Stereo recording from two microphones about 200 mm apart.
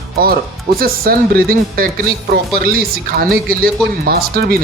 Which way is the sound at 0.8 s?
50° right (ahead or behind).